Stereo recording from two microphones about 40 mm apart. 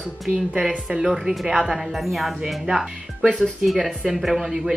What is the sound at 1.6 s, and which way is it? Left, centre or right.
A woman's voice, centre.